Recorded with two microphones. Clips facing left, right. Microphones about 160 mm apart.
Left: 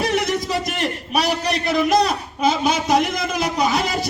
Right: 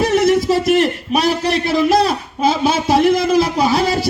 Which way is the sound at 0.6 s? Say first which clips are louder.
Right 11 dB; centre (ahead or behind).